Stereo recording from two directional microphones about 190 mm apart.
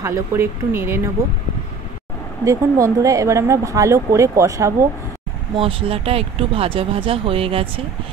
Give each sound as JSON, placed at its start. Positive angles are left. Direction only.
{"t": 0.0, "sound": "speech", "side_deg": -15}
{"t": 2.4, "sound": "speech", "side_deg": -15}
{"t": 5.6, "sound": "speech", "side_deg": -30}